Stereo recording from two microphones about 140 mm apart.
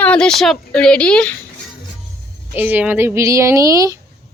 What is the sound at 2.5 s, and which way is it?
Speech, 10° right (ahead or behind).